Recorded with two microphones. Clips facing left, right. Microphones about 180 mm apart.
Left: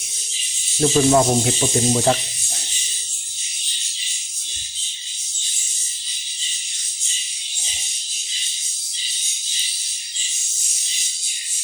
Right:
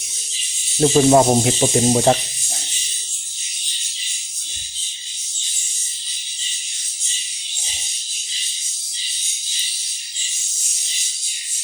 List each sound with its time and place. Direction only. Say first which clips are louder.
0.8 s speech: right 3 dB; 30° right (ahead or behind)